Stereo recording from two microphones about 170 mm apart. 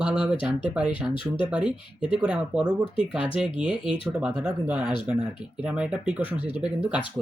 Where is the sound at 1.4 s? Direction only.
5° right (ahead or behind).